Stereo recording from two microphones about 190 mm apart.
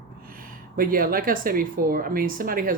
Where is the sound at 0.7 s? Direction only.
50° right (ahead or behind).